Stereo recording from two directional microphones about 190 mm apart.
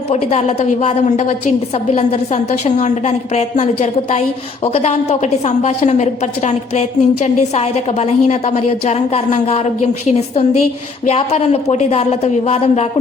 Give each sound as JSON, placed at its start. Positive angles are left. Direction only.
{"t": 0.1, "sound": "a woman's voice", "side_deg": 35}